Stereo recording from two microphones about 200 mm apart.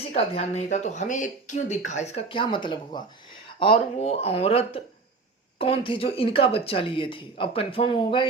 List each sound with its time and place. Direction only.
0.0 s speech: 30° left (ahead or behind)